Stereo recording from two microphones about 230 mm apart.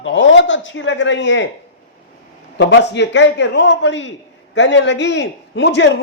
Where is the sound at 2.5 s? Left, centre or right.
Left.